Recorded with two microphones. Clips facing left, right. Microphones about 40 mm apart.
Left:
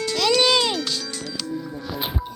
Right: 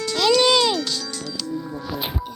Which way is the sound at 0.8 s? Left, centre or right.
Centre.